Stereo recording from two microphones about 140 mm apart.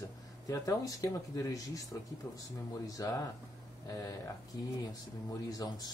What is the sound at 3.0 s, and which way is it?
Speech, 25° left (ahead or behind).